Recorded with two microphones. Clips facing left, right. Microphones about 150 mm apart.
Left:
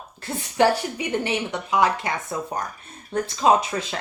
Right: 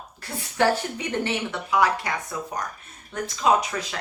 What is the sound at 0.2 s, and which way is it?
A woman's voice, 20° left (ahead or behind).